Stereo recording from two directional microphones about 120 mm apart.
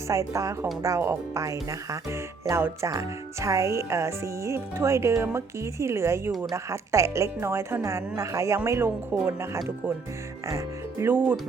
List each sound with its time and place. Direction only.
0.1 s speech: 25° right (ahead or behind)
10.9 s speech: 20° right (ahead or behind)